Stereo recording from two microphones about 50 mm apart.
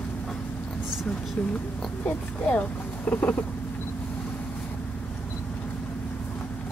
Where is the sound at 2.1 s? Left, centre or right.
Left.